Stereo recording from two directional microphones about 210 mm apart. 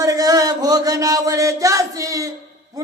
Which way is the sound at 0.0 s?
15° right (ahead or behind).